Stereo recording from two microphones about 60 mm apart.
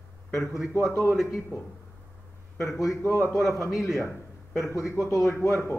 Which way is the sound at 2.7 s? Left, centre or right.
Left.